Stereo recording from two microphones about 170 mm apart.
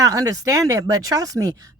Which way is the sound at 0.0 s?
20° right (ahead or behind).